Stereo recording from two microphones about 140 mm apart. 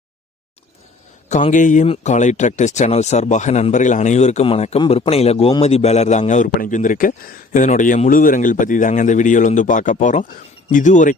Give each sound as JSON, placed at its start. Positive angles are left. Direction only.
{"t": 1.3, "sound": "a man's voice", "side_deg": 60}